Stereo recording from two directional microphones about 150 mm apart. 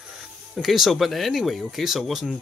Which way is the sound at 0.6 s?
Centre (ahead or behind).